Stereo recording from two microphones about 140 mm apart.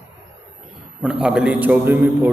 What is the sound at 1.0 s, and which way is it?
A man's voice, 5° right (ahead or behind).